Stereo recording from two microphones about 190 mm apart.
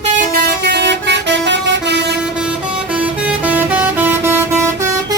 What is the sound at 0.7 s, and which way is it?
Vehicle, 65° right (ahead or behind).